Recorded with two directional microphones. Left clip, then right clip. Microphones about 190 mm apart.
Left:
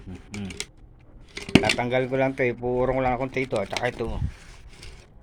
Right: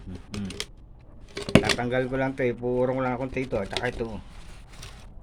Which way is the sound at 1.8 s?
10° left (ahead or behind).